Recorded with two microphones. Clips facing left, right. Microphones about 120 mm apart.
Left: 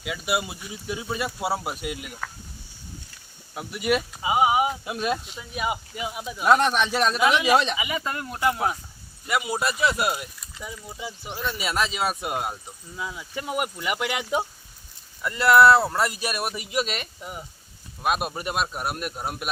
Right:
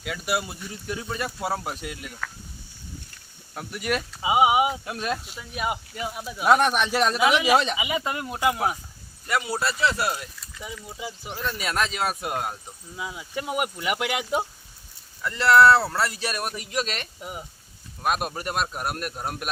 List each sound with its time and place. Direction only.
0.0 s speech: 5° left (ahead or behind)
3.5 s speech: 5° left (ahead or behind)
4.2 s speech: 15° right (ahead or behind)
4.9 s speech: 5° left (ahead or behind)
6.2 s speech: 5° right (ahead or behind)
7.8 s speech: 15° right (ahead or behind)
9.2 s speech: 10° left (ahead or behind)
10.6 s speech: centre (ahead or behind)
13.0 s speech: 5° right (ahead or behind)
15.2 s speech: 15° left (ahead or behind)
17.2 s speech: 10° right (ahead or behind)
18.0 s speech: 5° left (ahead or behind)